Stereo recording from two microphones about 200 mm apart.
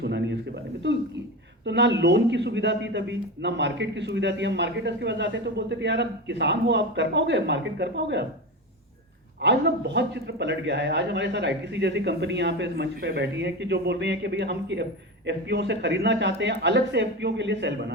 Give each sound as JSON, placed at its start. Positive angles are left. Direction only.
{"t": 0.0, "sound": "a sound", "side_deg": -60}
{"t": 1.6, "sound": "a man's voice", "side_deg": -60}
{"t": 9.4, "sound": "a man's voice", "side_deg": -60}